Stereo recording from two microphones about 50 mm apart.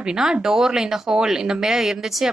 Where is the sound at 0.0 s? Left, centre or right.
Centre.